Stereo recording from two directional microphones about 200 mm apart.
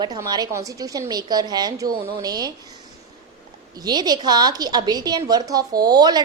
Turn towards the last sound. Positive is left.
turn(degrees=-20)  # may be behind; listen again after turning